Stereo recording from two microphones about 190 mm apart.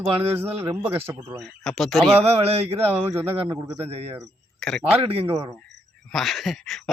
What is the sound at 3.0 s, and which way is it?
Speech, 10° right (ahead or behind).